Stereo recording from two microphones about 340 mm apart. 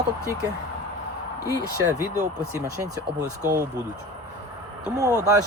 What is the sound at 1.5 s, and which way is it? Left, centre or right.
Speech, centre.